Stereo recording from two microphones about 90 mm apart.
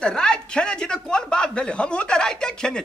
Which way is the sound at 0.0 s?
10° left (ahead or behind).